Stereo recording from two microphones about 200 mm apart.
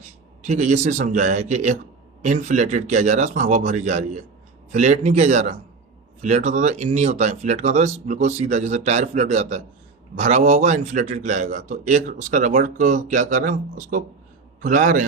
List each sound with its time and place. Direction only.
0.4 s a man's voice: 35° right (ahead or behind)